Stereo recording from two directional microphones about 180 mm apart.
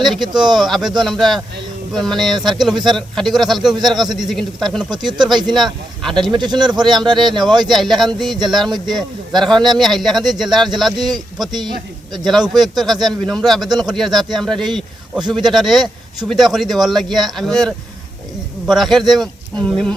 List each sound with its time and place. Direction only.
0.0 s a man's voice: centre (ahead or behind)
5.2 s speech: 25° right (ahead or behind)
5.5 s a man's voice: centre (ahead or behind)
6.3 s speech: 25° right (ahead or behind)
7.6 s a man's voice: centre (ahead or behind)
10.9 s speech: 25° right (ahead or behind)
12.2 s a man's voice: centre (ahead or behind)